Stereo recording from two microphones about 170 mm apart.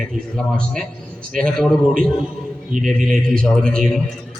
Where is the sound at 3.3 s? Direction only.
Centre (ahead or behind).